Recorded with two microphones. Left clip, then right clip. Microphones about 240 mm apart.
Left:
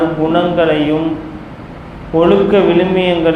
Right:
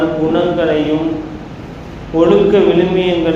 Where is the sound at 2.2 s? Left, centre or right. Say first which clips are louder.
Even; left.